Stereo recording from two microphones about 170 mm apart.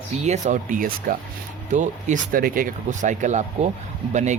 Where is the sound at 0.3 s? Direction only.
45° right (ahead or behind).